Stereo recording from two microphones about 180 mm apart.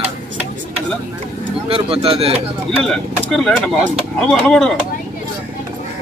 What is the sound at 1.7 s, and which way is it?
Speech, 30° right (ahead or behind).